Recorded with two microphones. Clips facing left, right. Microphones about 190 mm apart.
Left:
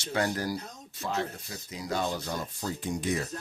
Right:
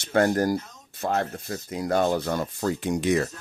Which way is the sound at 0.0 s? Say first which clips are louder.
Right 8 dB; 55° right (ahead or behind).